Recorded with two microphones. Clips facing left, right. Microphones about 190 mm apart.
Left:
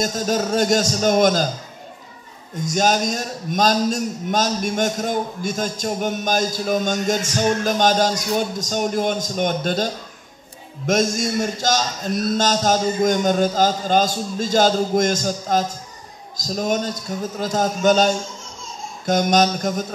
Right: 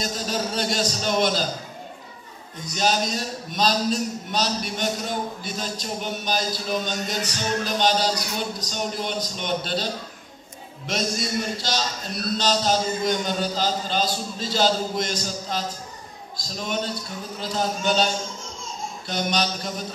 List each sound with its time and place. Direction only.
0.0 s a man's voice: 45° left (ahead or behind)
2.6 s a man's voice: 45° left (ahead or behind)
10.9 s a man's voice: 45° left (ahead or behind)